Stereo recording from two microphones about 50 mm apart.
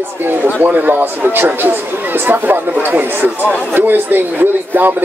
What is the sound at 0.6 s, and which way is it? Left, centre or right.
Speech, right.